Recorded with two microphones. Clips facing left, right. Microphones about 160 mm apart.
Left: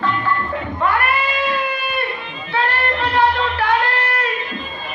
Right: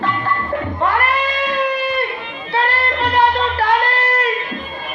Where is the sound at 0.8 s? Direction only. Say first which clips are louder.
Even; 35° right (ahead or behind).